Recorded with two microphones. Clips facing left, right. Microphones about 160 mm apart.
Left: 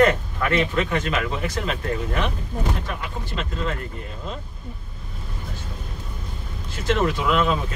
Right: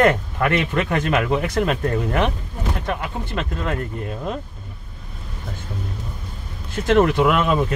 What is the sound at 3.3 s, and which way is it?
Speech, 55° right (ahead or behind).